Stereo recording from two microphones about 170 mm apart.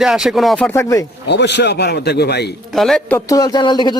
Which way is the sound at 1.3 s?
90° left.